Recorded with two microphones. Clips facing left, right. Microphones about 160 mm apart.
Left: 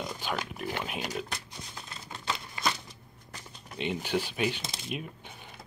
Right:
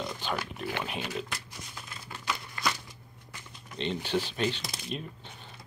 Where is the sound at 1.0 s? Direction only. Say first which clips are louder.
Even; 30° left (ahead or behind).